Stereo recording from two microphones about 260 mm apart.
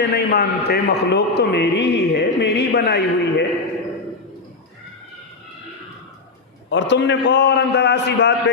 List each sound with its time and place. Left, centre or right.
0.0 s a man's voice: left
6.7 s a man's voice: left